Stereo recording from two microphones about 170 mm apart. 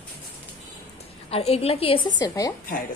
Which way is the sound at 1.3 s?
35° left (ahead or behind).